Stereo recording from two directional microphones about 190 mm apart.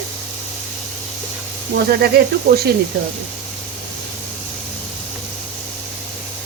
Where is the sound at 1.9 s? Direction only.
55° right (ahead or behind).